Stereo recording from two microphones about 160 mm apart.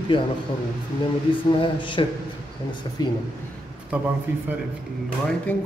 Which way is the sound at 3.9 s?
10° right (ahead or behind).